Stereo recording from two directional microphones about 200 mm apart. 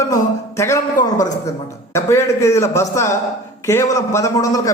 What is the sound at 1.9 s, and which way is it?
A man's voice, 15° left (ahead or behind).